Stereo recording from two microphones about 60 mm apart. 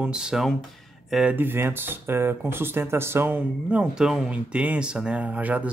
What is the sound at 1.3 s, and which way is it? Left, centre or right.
Speech, right.